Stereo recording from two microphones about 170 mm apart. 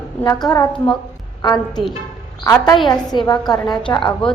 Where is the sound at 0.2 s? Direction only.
20° left (ahead or behind).